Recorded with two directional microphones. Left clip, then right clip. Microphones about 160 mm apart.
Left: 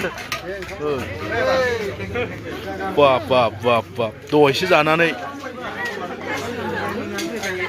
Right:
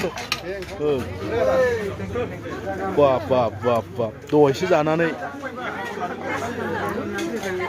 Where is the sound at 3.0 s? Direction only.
15° right (ahead or behind).